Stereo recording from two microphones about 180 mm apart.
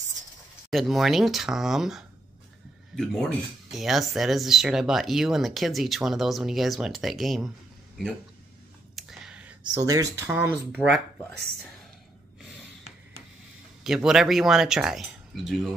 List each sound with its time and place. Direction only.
0.7 s speech: centre (ahead or behind)
8.9 s a sound: centre (ahead or behind)
9.8 s speech: 20° right (ahead or behind)
13.8 s speech: centre (ahead or behind)